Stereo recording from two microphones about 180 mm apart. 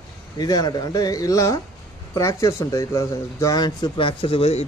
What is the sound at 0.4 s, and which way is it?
Speech, 20° left (ahead or behind).